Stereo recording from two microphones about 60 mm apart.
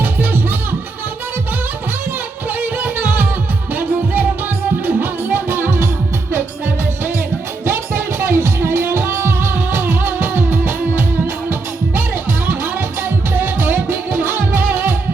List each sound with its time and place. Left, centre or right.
2.6 s music: right
7.6 s music: right
13.0 s music: right